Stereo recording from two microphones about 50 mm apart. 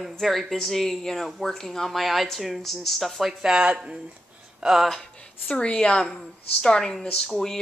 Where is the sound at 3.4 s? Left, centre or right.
Centre.